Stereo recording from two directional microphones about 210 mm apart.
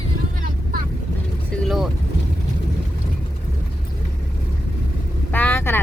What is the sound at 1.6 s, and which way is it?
Speech, centre (ahead or behind).